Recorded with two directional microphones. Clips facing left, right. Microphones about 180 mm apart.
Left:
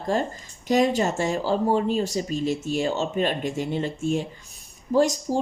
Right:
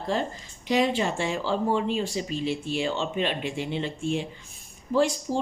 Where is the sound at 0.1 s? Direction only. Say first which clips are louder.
Left 3 dB; 45° left (ahead or behind).